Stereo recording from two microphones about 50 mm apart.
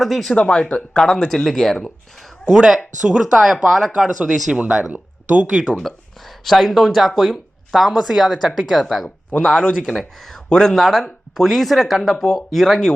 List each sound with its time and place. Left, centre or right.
0.0 s speech: centre
0.3 s speech: centre
2.5 s speech: centre
3.4 s speech: centre
4.5 s speech: right
5.7 s speech: centre